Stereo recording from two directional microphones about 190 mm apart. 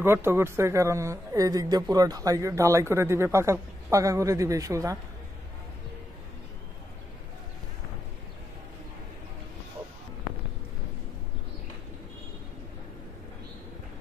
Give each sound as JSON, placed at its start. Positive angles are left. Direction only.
{"t": 0.0, "sound": "speech", "side_deg": -10}